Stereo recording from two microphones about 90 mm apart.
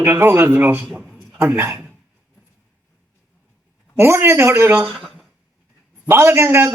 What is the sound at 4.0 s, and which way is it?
Speech, 25° right (ahead or behind).